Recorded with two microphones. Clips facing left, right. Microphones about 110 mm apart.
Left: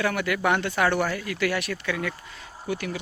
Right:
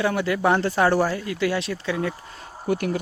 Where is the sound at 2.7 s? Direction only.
50° right (ahead or behind).